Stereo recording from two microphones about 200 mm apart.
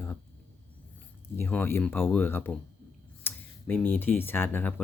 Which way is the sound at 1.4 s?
10° left (ahead or behind).